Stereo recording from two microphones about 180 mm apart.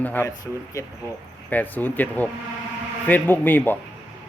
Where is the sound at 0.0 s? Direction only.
10° left (ahead or behind).